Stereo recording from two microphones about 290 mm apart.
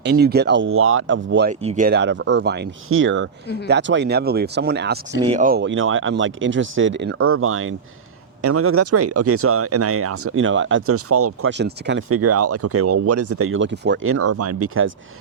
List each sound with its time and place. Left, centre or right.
0.0 s speech: right
1.5 s speech: right
11.5 s speech: right